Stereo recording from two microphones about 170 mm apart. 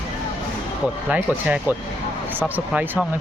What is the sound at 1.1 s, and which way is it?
Speech, 10° right (ahead or behind).